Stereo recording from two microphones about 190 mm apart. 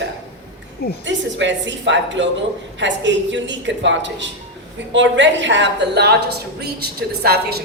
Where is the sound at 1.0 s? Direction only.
70° right (ahead or behind).